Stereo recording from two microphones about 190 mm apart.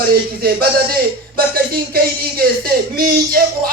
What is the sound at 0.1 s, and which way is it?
Speech, 55° right (ahead or behind).